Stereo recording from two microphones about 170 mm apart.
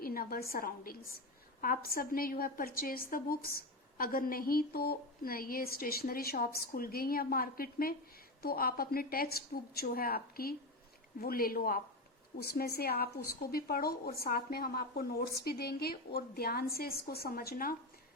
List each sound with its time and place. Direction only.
0.0 s a woman's voice: 60° left (ahead or behind)